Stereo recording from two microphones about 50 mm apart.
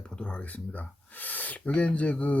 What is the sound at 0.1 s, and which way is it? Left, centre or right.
Speech, left.